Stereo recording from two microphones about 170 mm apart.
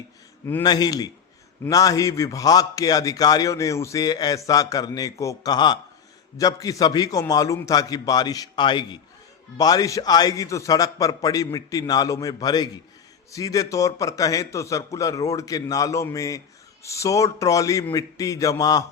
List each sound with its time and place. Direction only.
0.6 s a man's voice: 25° left (ahead or behind)